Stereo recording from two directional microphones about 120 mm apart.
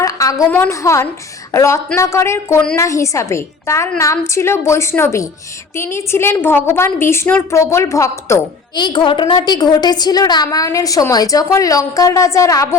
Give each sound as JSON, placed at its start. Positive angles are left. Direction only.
{"t": 0.0, "sound": "a sound", "side_deg": 25}
{"t": 0.6, "sound": "a woman's voice", "side_deg": 25}
{"t": 8.7, "sound": "a woman's voice", "side_deg": 40}